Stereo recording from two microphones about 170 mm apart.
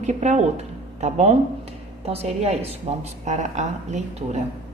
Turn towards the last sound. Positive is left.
turn(degrees=-45)  # may be behind; listen again after turning